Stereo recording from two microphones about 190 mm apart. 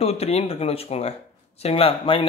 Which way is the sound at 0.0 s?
30° left (ahead or behind).